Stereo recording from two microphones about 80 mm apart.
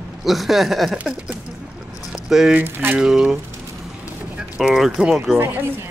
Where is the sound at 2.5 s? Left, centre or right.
Right.